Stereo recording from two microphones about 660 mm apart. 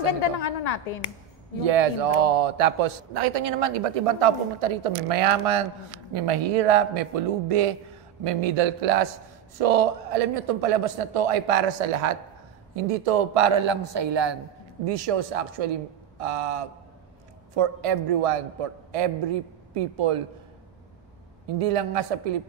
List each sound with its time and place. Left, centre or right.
0.0 s a woman's voice: left
1.6 s speech: right
12.7 s speech: right
13.7 s speech: right
14.9 s a man's voice: right
21.5 s a man's voice: right